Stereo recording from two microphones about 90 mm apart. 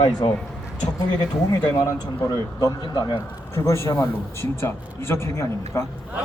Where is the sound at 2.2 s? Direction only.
45° left (ahead or behind).